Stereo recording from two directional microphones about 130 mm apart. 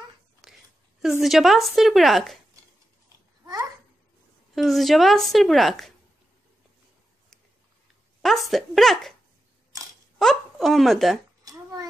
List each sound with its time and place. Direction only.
0.4 s a sound: centre (ahead or behind)
1.2 s a woman's voice: centre (ahead or behind)
4.6 s a woman's voice: centre (ahead or behind)
8.2 s a woman's voice: centre (ahead or behind)
10.1 s speech: centre (ahead or behind)